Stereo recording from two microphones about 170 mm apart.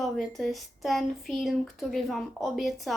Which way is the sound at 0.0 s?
Centre (ahead or behind).